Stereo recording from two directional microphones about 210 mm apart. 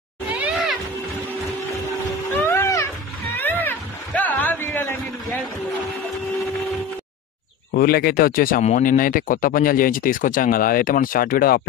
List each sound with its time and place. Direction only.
0.3 s a sound: 5° right (ahead or behind)
2.3 s music: 10° left (ahead or behind)
3.3 s cat: 10° left (ahead or behind)
7.7 s speech: 45° left (ahead or behind)